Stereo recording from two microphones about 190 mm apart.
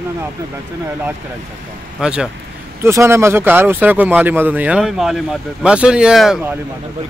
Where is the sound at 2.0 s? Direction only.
5° right (ahead or behind).